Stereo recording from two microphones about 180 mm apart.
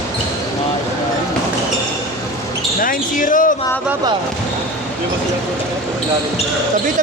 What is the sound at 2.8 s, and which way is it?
Speech, 50° left (ahead or behind).